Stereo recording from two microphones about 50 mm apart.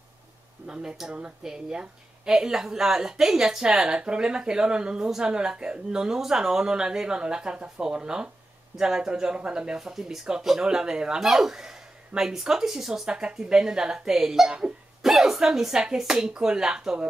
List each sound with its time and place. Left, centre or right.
0.7 s speech: centre